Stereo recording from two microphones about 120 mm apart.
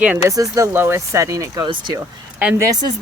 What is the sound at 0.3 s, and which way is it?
Speech, 25° right (ahead or behind).